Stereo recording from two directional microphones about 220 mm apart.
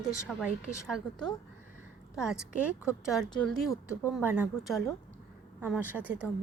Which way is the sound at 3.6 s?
10° left (ahead or behind).